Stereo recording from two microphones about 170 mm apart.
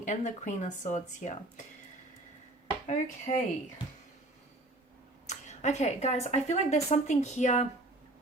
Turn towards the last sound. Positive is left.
turn(degrees=45)  # may be behind; listen again after turning